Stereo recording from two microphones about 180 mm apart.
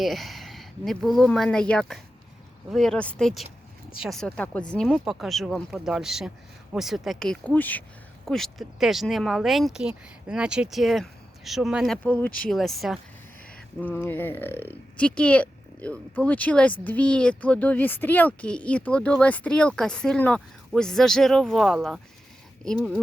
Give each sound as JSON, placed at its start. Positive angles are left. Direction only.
{"t": 0.0, "sound": "speech", "side_deg": 0}
{"t": 12.0, "sound": "speech", "side_deg": 10}
{"t": 13.8, "sound": "speech", "side_deg": 10}